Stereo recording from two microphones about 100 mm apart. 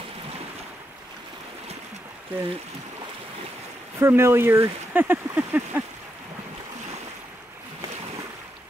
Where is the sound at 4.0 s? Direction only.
25° right (ahead or behind).